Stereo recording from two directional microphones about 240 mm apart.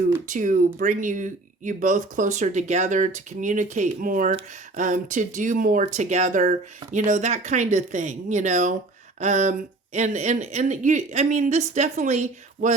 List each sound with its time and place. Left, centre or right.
0.3 s speech: right